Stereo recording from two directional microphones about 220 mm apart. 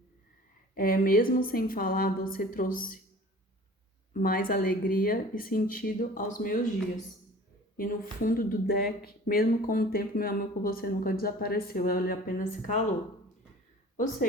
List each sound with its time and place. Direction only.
0.7 s speech: 40° left (ahead or behind)
4.1 s speech: 40° left (ahead or behind)